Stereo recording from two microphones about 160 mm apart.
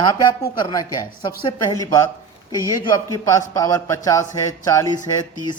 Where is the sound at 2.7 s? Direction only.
20° left (ahead or behind).